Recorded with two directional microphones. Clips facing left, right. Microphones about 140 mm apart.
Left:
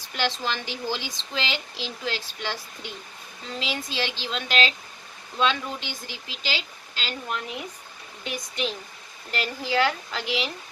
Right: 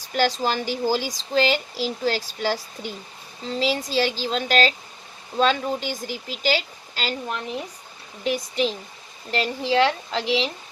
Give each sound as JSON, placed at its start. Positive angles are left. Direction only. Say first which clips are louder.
{"t": 0.1, "sound": "speech", "louder": "right 6 dB", "side_deg": -40}
{"t": 8.2, "sound": "a child's voice", "louder": "right 7 dB", "side_deg": -35}